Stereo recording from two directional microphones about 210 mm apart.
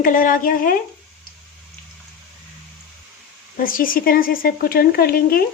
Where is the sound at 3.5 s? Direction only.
40° left (ahead or behind).